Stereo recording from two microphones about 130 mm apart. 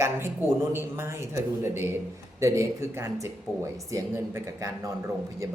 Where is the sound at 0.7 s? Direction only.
20° right (ahead or behind).